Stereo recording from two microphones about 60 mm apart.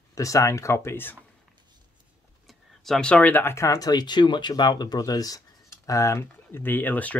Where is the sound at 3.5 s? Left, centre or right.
Left.